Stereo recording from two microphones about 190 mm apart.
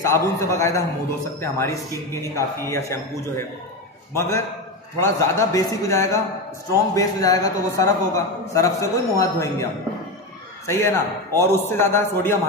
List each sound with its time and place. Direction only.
0.0 s a man's voice: 15° left (ahead or behind)
10.7 s a man's voice: 15° left (ahead or behind)